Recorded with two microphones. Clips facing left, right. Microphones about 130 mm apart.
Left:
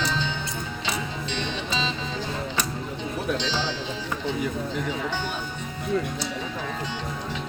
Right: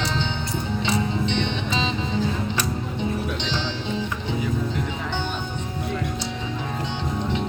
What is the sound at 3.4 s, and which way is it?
Music, 20° right (ahead or behind).